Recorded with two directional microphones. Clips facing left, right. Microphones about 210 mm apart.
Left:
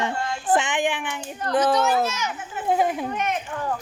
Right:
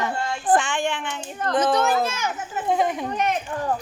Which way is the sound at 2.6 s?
5° left (ahead or behind).